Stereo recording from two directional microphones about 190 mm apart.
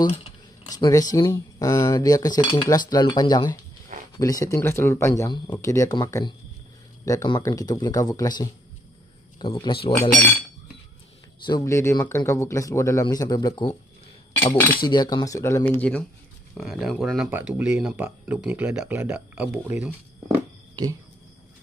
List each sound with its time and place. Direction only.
0.7 s speech: 20° left (ahead or behind)
11.4 s speech: 20° left (ahead or behind)
14.8 s speech: 25° left (ahead or behind); by 20.3 s 10° right (ahead or behind)